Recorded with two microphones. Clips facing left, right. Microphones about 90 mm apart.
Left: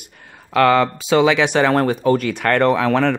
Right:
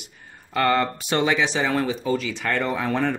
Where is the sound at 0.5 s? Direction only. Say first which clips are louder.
Left 7 dB; 90° left.